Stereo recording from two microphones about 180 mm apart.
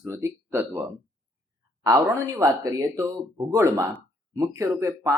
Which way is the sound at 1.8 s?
20° right (ahead or behind).